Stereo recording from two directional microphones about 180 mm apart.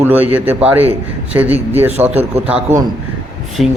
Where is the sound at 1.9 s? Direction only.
35° right (ahead or behind).